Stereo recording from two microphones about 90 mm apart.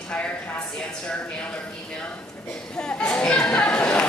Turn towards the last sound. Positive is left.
turn(degrees=10)  # may be behind; listen again after turning